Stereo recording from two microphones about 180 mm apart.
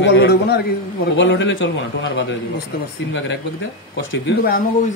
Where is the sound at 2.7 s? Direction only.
60° left (ahead or behind).